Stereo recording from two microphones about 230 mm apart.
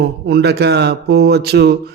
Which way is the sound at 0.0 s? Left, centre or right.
Right.